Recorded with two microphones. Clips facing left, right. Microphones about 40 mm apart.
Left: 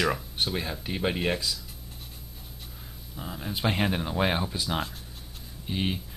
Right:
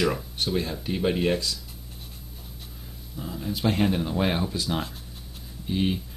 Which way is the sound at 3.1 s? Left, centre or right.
Centre.